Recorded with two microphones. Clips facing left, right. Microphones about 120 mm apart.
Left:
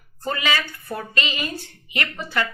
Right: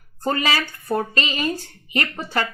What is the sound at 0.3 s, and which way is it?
A woman's voice, 40° right (ahead or behind).